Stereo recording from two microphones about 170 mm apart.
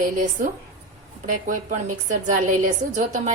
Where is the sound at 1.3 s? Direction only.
50° right (ahead or behind).